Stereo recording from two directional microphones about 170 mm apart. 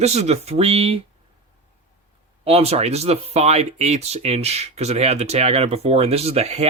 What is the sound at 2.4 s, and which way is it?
Speech, 35° right (ahead or behind).